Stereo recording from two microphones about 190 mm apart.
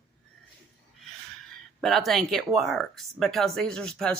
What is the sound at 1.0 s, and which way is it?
Speech, centre (ahead or behind).